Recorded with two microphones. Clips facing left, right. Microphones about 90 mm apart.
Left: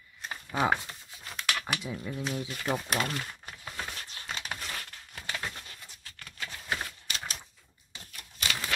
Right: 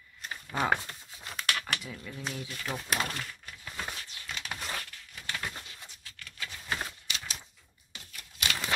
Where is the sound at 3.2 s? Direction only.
45° left (ahead or behind).